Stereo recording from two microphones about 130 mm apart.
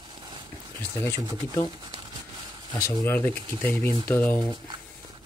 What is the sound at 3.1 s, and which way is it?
Speech, 15° left (ahead or behind).